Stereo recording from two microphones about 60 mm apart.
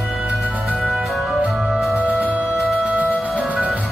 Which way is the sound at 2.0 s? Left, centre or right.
Right.